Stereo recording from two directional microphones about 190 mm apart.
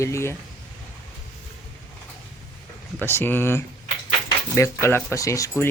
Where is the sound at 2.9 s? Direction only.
10° left (ahead or behind).